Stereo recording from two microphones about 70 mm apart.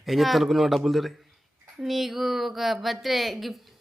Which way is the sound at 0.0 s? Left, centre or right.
Centre.